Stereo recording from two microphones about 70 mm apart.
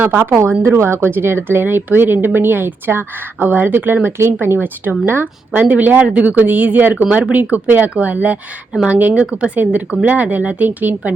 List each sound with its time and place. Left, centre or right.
0.0 s speech: right